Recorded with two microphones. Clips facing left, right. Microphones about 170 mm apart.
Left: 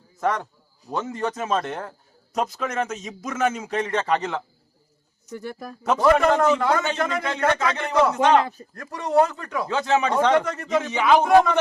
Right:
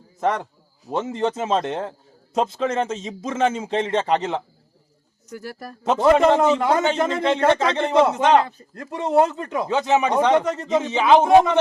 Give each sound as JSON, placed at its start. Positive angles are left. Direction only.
{"t": 0.2, "sound": "a man's voice", "side_deg": -25}
{"t": 5.3, "sound": "speech", "side_deg": -5}
{"t": 5.8, "sound": "a man's voice", "side_deg": -25}